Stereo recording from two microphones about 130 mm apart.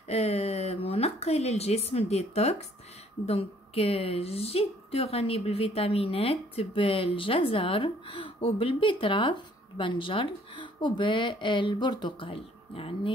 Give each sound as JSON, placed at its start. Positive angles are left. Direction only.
{"t": 0.1, "sound": "a woman's voice", "side_deg": 50}